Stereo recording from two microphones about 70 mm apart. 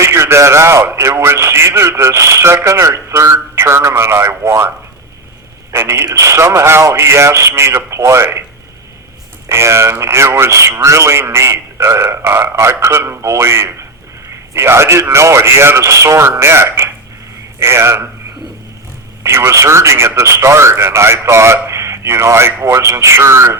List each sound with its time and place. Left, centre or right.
0.0 s a man's voice: right
5.7 s speech: right
9.5 s speech: right
19.2 s speech: right